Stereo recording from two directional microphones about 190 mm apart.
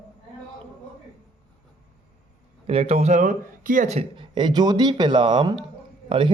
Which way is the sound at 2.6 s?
30° right (ahead or behind).